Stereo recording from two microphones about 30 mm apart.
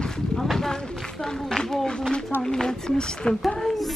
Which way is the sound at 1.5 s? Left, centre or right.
Left.